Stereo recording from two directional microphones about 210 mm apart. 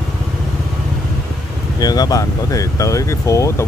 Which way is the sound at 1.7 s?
20° left (ahead or behind).